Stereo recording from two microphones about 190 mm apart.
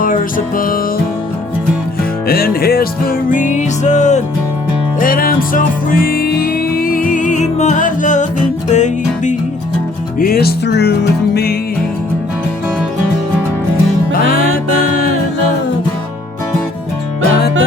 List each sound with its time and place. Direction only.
0.0 s music: 45° left (ahead or behind)
2.2 s music: 55° left (ahead or behind)
4.9 s music: 50° left (ahead or behind)
10.2 s music: 50° left (ahead or behind)